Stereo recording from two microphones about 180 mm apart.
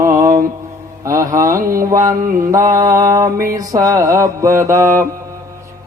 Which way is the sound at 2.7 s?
15° right (ahead or behind).